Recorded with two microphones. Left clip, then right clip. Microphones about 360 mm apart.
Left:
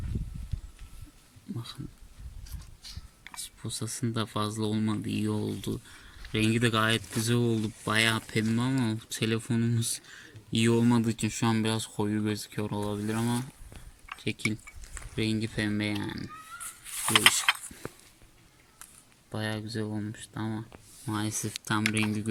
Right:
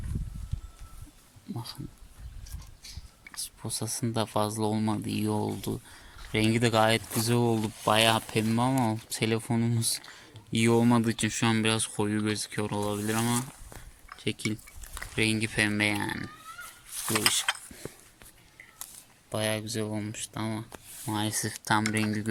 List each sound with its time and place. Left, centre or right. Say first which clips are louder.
3.8 s speech: right 3 dB; centre
5.2 s speech: right 4 dB; right
5.5 s speech: right 1 dB; centre
17.1 s mechanisms: left 5 dB; centre
19.3 s speech: right 5 dB; centre